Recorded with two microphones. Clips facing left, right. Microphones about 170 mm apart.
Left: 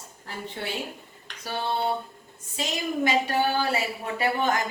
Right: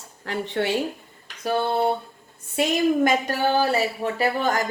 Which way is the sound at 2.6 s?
50° right (ahead or behind).